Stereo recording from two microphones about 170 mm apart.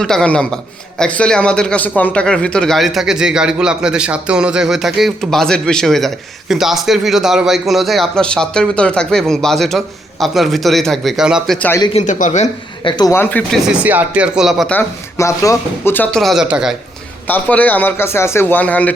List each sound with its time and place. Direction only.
0.0 s a man's voice: 5° left (ahead or behind)
11.9 s a man's voice: 45° left (ahead or behind)
12.8 s a man's voice: 25° left (ahead or behind)
13.1 s a man's voice: 10° left (ahead or behind)
13.7 s speech: 10° right (ahead or behind)
14.7 s a man's voice: 15° left (ahead or behind)
16.2 s a man's voice: 5° right (ahead or behind)
17.2 s a man's voice: 10° left (ahead or behind)